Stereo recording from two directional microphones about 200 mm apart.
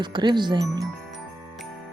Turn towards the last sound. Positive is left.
turn(degrees=-20)  # may be behind; listen again after turning